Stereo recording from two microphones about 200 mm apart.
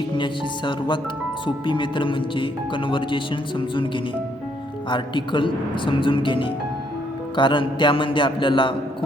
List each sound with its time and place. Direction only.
0.2 s a man's voice: 25° left (ahead or behind)
4.9 s a man's voice: 25° left (ahead or behind)